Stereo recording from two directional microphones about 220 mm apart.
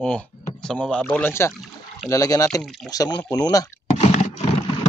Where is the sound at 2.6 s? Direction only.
Centre (ahead or behind).